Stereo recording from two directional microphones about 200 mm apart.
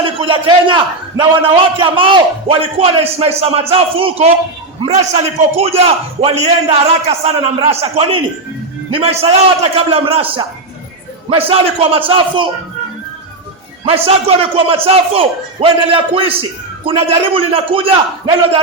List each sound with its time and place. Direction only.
0.0 s a man's voice: 25° right (ahead or behind)
13.8 s speech: 30° right (ahead or behind)